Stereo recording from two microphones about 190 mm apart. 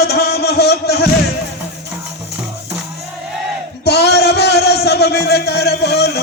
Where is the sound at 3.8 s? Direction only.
60° left (ahead or behind).